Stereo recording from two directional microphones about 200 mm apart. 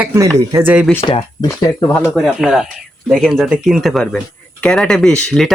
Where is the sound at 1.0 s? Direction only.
25° left (ahead or behind).